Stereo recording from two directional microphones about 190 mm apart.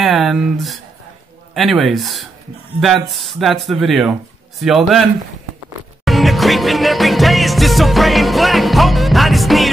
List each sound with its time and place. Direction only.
0.0 s speech: centre (ahead or behind)
1.5 s music: centre (ahead or behind)
6.0 s music: centre (ahead or behind)